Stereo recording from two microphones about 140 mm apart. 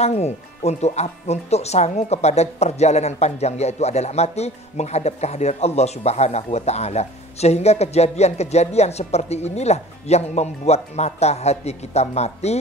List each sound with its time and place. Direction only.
0.0 s speech: 50° left (ahead or behind)